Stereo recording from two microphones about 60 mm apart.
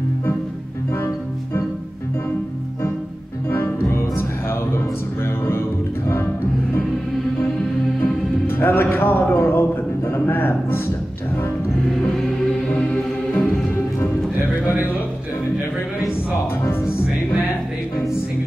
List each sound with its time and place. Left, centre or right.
3.4 s music: left
8.0 s music: left